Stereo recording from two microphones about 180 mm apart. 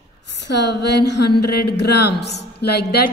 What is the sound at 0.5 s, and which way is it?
A woman's voice, 70° left (ahead or behind).